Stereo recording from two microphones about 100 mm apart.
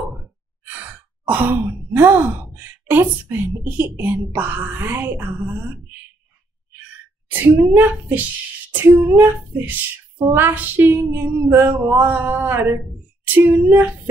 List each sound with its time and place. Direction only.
1.2 s speech: 20° right (ahead or behind)
7.2 s speech: 20° right (ahead or behind)